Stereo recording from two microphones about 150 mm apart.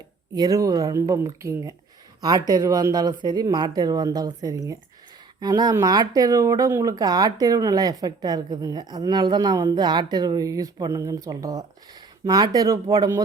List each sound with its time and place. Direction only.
0.3 s a woman's voice: 25° right (ahead or behind)